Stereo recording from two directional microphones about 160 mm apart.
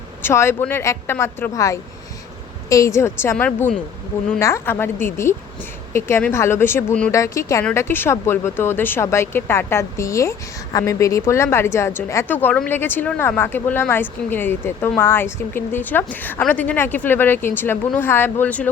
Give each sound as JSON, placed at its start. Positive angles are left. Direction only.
{"t": 0.2, "sound": "speech", "side_deg": 15}